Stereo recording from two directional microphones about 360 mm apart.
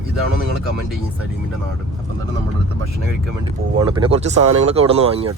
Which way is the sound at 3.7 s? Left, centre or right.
Centre.